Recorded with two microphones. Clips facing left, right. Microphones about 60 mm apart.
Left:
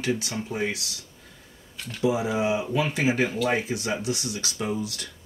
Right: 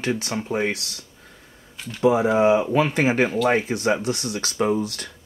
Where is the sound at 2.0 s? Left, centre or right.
Right.